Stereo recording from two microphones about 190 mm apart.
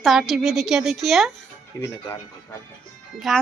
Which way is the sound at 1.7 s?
15° left (ahead or behind).